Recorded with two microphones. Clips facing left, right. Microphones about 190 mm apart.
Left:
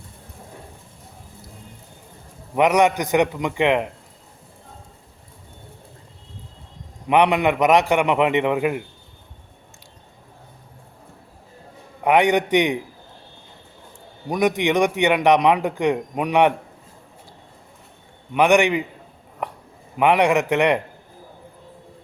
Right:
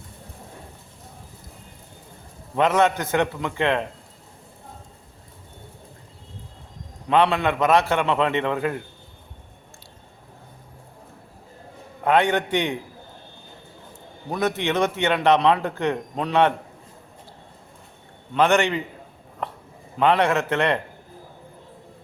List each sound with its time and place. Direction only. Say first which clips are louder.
2.6 s a man's voice: left 3 dB; 15° left (ahead or behind)
7.1 s a man's voice: left 2 dB; 15° left (ahead or behind)
12.0 s a man's voice: left 3 dB; 15° left (ahead or behind)
14.3 s a man's voice: left 4 dB; 15° left (ahead or behind)
18.3 s a man's voice: left 3 dB; 15° left (ahead or behind)
19.4 s a sound: left 2 dB; 15° left (ahead or behind)
20.0 s a man's voice: left 2 dB; 15° left (ahead or behind)